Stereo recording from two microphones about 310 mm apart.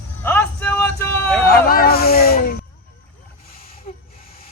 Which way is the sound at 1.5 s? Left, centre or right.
Left.